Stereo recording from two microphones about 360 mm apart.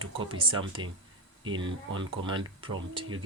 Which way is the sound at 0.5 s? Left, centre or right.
Right.